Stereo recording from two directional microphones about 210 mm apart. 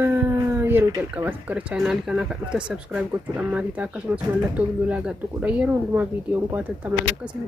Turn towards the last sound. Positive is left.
turn(degrees=-5)  # may be behind; listen again after turning